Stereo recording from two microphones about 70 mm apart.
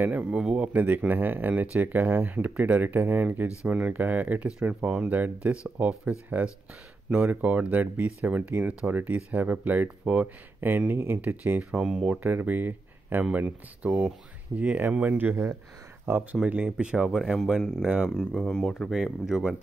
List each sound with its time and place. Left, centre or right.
0.0 s speech: right
11.8 s speech: centre
12.1 s speech: right
16.7 s speech: centre
17.6 s speech: centre
19.2 s speech: centre